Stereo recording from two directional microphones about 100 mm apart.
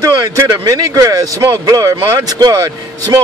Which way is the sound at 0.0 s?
40° right (ahead or behind).